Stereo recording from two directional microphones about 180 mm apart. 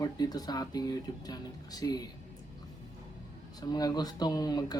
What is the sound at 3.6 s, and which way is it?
Speech, 20° left (ahead or behind).